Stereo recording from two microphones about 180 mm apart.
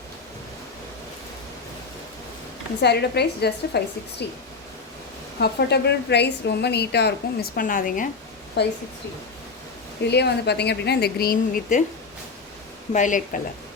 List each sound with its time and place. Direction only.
2.8 s a woman's voice: 65° left (ahead or behind)
5.4 s a woman's voice: 65° left (ahead or behind)
7.5 s speech: 50° left (ahead or behind)
8.6 s a woman's voice: 70° left (ahead or behind)
10.1 s a woman's voice: 70° left (ahead or behind); by 11.8 s 55° left (ahead or behind)
12.9 s speech: 45° left (ahead or behind)